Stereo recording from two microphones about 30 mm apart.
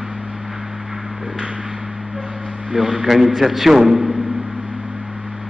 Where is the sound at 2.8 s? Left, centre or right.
Right.